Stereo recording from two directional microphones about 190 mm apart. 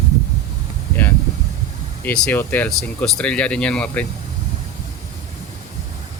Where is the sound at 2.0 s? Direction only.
5° left (ahead or behind).